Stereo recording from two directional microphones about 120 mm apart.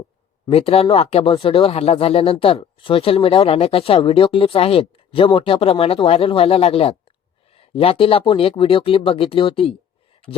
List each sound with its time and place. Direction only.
0.5 s speech: 55° left (ahead or behind)